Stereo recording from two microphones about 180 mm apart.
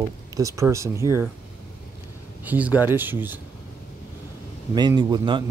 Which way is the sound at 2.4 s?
10° right (ahead or behind).